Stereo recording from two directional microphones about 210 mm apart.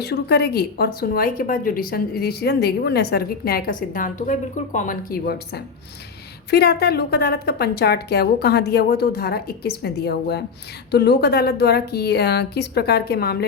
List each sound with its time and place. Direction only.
0.0 s a woman's voice: 50° left (ahead or behind)